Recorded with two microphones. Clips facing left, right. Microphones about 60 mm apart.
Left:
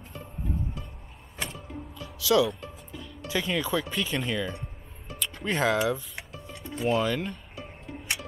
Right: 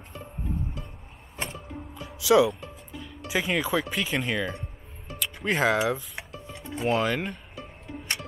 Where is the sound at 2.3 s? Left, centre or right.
Right.